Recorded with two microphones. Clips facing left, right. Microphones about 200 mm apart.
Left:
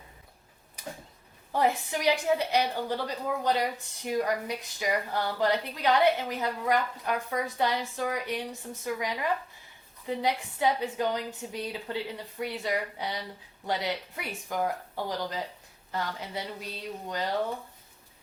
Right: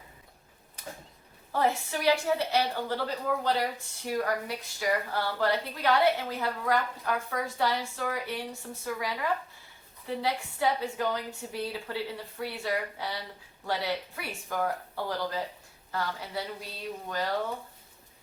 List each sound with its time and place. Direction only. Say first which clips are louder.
1.5 s a woman's voice: left 1 dB; 15° left (ahead or behind)